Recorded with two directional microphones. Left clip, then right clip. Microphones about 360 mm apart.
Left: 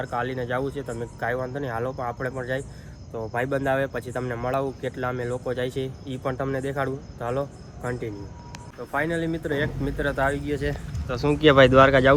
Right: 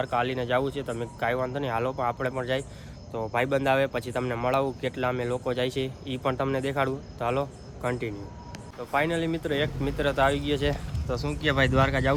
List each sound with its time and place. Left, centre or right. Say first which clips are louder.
0.0 s speech: right 1 dB; centre
10.3 s speech: right 1 dB; centre
11.2 s speech: left 10 dB; centre